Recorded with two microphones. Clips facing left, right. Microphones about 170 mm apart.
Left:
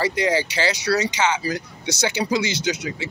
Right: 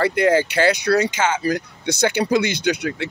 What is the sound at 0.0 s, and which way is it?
Speech, 55° right (ahead or behind).